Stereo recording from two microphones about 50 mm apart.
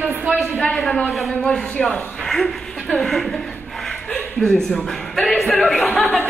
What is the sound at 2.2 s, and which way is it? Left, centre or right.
Speech, centre.